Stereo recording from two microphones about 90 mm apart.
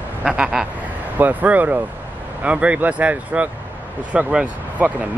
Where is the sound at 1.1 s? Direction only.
20° right (ahead or behind).